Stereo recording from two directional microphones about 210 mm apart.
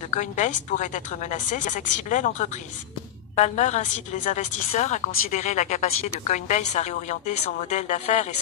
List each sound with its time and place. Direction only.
0.1 s a woman's voice: 35° left (ahead or behind)